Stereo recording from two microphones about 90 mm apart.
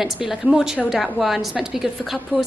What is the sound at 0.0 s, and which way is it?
A woman's voice, 5° right (ahead or behind).